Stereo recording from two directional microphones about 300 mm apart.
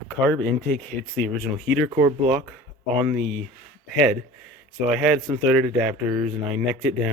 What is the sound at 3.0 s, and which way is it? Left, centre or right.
Speech, centre.